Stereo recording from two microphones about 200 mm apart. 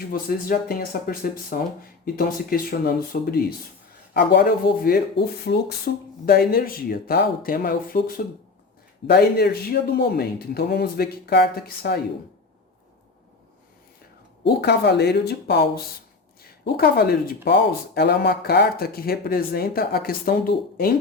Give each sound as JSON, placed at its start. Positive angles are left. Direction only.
{"t": 0.1, "sound": "speech", "side_deg": 45}
{"t": 14.4, "sound": "speech", "side_deg": 55}